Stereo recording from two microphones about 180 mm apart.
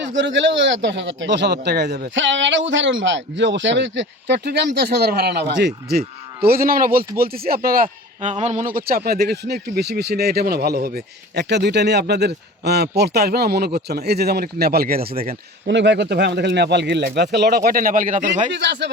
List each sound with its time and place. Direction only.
0.2 s a man's voice: 85° right; by 6.0 s 70° right (ahead or behind)
6.4 s a man's voice: 55° right (ahead or behind)
15.3 s speech: 75° right (ahead or behind); by 18.5 s 45° right (ahead or behind)
18.5 s speech: 75° right (ahead or behind)